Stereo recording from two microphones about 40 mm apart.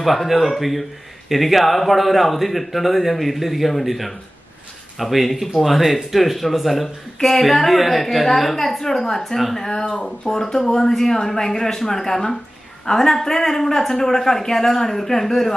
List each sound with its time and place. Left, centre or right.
0.0 s speech: centre
9.8 s speech: left
10.2 s speech: centre